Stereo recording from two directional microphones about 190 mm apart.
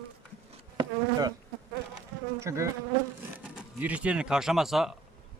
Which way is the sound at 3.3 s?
10° right (ahead or behind).